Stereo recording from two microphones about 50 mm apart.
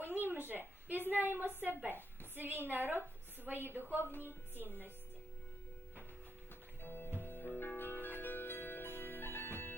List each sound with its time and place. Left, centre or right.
0.0 s a sound: right
1.8 s a woman's voice: right
6.8 s speech: left
7.2 s music: left